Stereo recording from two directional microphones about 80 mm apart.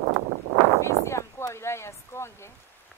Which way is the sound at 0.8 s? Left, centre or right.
Left.